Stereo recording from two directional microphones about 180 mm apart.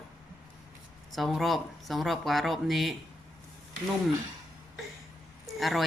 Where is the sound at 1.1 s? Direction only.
Centre (ahead or behind).